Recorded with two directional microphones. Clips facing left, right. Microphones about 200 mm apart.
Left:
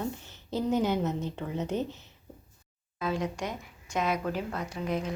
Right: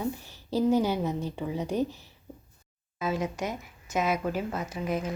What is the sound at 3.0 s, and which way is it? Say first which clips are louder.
Speech: right 1 dB; 5° right (ahead or behind).